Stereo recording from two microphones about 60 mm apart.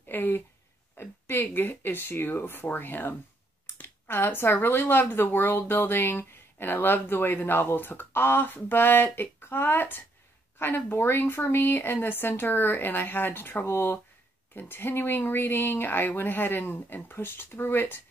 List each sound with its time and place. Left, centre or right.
0.1 s speech: left